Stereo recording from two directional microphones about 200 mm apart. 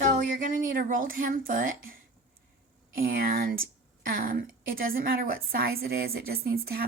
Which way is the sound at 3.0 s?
45° right (ahead or behind).